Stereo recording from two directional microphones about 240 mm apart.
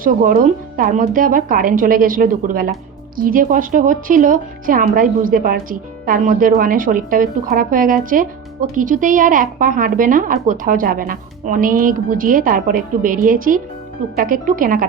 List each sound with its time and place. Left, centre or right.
0.0 s speech: right